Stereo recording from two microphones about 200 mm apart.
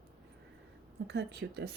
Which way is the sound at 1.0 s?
60° right (ahead or behind).